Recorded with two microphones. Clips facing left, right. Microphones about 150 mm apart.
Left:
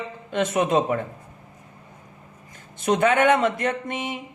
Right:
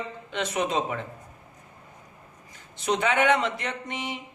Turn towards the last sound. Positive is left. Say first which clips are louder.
# left 5 dB
turn(degrees=50)  # may be behind; listen again after turning